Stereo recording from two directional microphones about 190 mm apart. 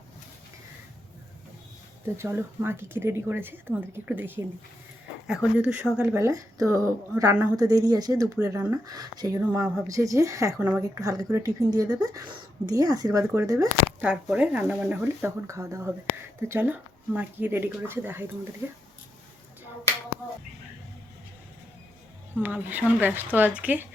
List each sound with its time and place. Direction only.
2.1 s a woman's voice: 15° right (ahead or behind)
6.1 s a woman's voice: 15° right (ahead or behind)
9.4 s a woman's voice: 10° right (ahead or behind)
22.4 s a woman's voice: 10° right (ahead or behind)